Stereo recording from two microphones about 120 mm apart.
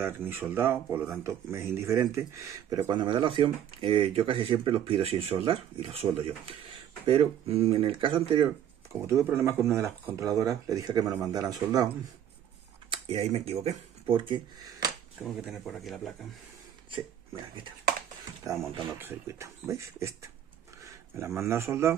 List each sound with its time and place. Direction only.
0.0 s speech: 20° right (ahead or behind)
2.9 s speech: 40° right (ahead or behind)
9.0 s speech: 20° right (ahead or behind)
12.9 s speech: 55° right (ahead or behind)
14.1 s speech: 40° right (ahead or behind)
15.6 s speech: centre (ahead or behind)
18.9 s speech: 20° right (ahead or behind)